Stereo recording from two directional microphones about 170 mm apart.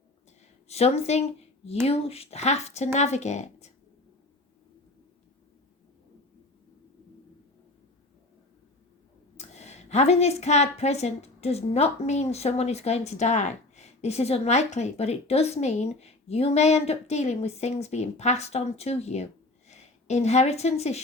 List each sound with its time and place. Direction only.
0.7 s a woman's voice: 40° left (ahead or behind)
9.4 s a woman's voice: 40° left (ahead or behind)